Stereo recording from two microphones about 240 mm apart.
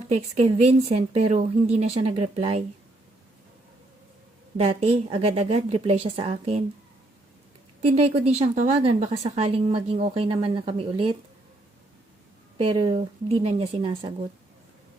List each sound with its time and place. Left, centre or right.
0.1 s speech: right
4.5 s speech: right
7.8 s speech: right
12.5 s speech: right